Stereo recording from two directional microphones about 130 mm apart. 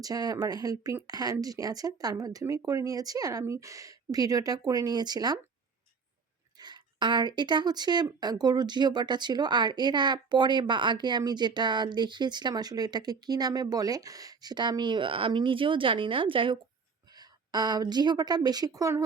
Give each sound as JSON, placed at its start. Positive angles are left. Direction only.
{"t": 0.0, "sound": "speech", "side_deg": -30}
{"t": 6.6, "sound": "a woman's voice", "side_deg": -35}